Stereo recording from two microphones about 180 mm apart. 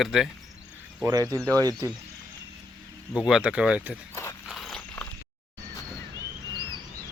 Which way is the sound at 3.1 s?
5° right (ahead or behind).